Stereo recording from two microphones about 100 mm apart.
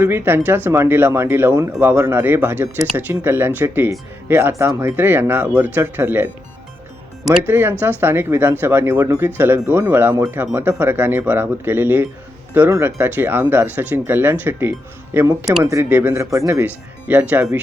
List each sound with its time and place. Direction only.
0.0 s speech: 20° right (ahead or behind)
7.4 s speech: 20° right (ahead or behind)